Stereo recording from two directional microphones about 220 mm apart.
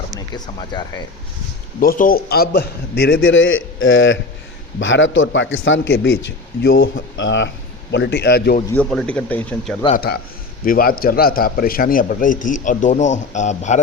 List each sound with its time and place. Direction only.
0.2 s speech: 20° left (ahead or behind)
1.8 s a man's voice: 40° left (ahead or behind)
3.2 s a man's voice: 60° left (ahead or behind); by 8.6 s 45° left (ahead or behind)
8.7 s speech: 5° left (ahead or behind)
10.7 s speech: 40° left (ahead or behind)